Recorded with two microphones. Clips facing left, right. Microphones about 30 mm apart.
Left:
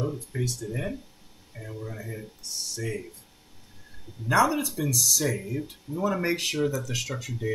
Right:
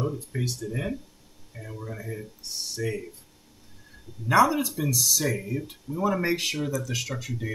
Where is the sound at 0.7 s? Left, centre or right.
Centre.